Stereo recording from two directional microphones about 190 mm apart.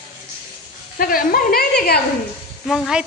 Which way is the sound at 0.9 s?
50° left (ahead or behind).